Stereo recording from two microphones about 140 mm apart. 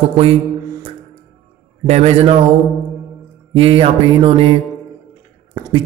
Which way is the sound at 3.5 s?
45° right (ahead or behind).